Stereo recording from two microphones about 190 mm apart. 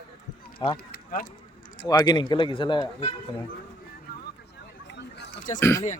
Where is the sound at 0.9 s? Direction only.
50° left (ahead or behind).